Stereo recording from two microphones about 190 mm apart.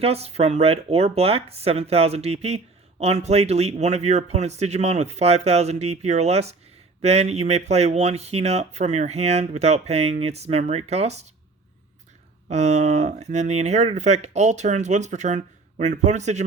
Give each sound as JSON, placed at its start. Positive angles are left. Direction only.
{"t": 0.0, "sound": "speech", "side_deg": -30}
{"t": 12.5, "sound": "speech", "side_deg": -35}